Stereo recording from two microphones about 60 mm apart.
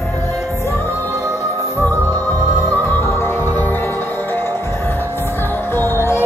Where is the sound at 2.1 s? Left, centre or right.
Left.